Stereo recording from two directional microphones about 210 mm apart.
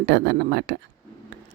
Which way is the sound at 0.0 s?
50° right (ahead or behind).